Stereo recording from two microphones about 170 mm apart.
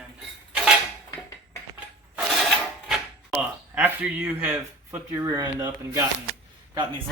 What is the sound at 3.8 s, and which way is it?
Speech, 10° right (ahead or behind).